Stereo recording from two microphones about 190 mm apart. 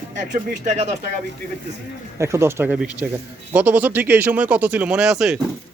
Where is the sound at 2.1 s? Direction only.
15° right (ahead or behind).